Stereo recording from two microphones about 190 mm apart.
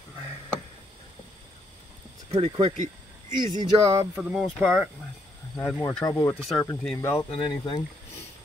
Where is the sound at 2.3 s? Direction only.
30° right (ahead or behind).